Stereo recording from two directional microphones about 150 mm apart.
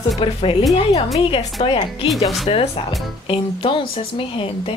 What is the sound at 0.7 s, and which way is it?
A woman's voice, 40° left (ahead or behind).